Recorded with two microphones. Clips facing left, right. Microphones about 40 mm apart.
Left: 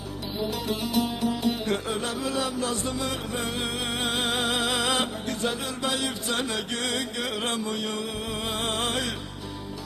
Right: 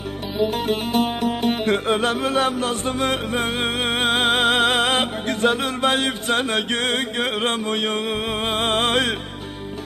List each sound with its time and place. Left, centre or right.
0.5 s music: right